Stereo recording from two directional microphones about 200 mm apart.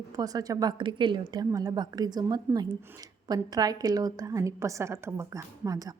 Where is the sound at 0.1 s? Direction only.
20° right (ahead or behind).